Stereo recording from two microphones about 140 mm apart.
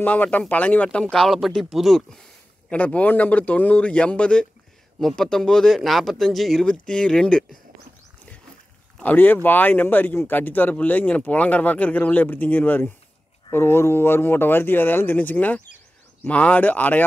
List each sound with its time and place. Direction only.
0.0 s speech: 10° left (ahead or behind)
9.0 s speech: 10° left (ahead or behind)